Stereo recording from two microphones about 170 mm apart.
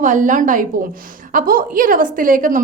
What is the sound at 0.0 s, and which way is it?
A woman's voice, 50° right (ahead or behind).